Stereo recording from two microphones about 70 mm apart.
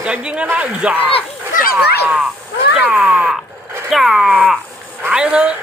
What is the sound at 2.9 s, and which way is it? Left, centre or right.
Speech, centre.